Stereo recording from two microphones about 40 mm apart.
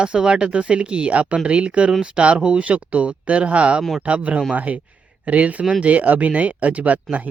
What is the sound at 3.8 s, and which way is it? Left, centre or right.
Speech, centre.